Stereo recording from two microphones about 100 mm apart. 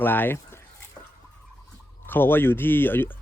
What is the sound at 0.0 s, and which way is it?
Speech, 20° left (ahead or behind).